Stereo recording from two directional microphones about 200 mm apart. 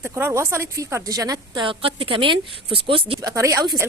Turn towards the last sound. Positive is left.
turn(degrees=-15)  # may be behind; listen again after turning